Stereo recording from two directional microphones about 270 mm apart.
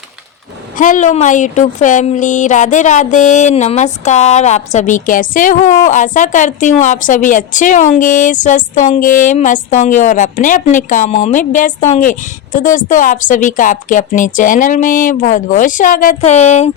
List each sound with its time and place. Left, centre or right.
0.8 s speech: left